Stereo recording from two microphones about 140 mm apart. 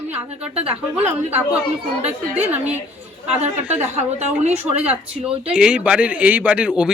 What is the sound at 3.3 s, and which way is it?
Speech, 10° right (ahead or behind).